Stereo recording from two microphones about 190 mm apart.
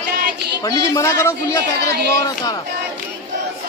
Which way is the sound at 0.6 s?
15° left (ahead or behind).